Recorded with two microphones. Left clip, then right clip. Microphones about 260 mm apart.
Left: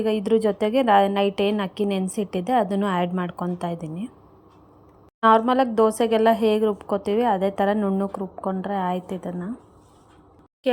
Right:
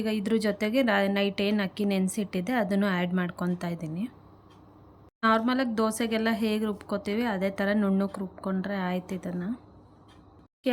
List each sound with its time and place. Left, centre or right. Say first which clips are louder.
0.0 s a woman's voice: left 8 dB; centre
5.2 s a woman's voice: left 8 dB; centre